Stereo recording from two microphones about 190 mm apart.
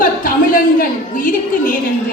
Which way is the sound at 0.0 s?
45° left (ahead or behind).